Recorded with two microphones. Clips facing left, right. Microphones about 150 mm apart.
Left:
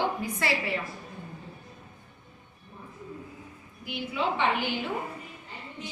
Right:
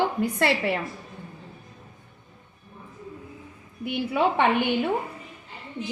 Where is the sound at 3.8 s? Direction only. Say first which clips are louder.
Right 7 dB; 60° right (ahead or behind).